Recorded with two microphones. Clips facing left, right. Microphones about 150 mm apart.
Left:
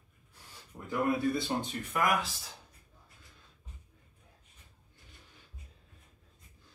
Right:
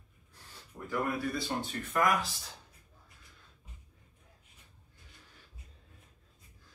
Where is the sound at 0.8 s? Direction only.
20° left (ahead or behind).